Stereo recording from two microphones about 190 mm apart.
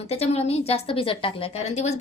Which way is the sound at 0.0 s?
35° left (ahead or behind).